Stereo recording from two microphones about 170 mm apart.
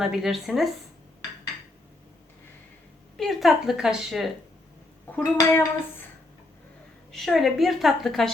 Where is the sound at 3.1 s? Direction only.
Centre (ahead or behind).